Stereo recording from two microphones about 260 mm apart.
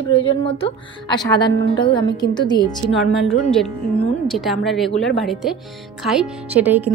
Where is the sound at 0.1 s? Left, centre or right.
Centre.